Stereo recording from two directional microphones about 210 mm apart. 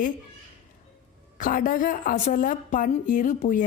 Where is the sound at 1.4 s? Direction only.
40° left (ahead or behind).